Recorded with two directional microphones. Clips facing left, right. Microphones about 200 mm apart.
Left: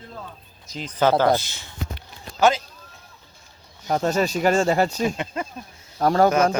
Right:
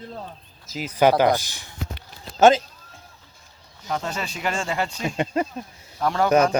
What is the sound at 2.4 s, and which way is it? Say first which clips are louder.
Speech: right 4 dB; 25° right (ahead or behind).